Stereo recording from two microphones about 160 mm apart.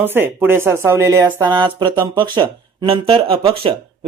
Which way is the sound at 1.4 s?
30° right (ahead or behind).